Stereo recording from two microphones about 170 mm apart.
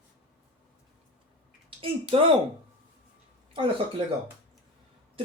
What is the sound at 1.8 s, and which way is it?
Speech, 35° right (ahead or behind).